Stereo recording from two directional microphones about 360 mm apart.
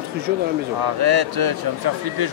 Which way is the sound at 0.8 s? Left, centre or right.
Right.